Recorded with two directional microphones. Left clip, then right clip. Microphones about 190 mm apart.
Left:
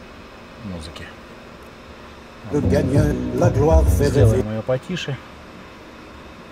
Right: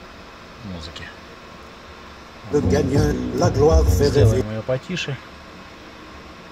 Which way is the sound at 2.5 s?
35° left (ahead or behind).